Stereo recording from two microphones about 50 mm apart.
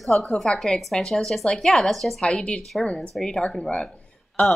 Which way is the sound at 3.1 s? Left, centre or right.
Centre.